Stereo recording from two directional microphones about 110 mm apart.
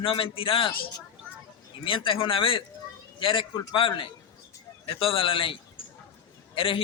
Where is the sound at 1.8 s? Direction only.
50° left (ahead or behind).